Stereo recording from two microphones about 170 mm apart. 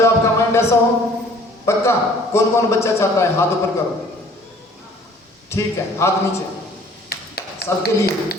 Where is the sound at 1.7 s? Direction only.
15° left (ahead or behind).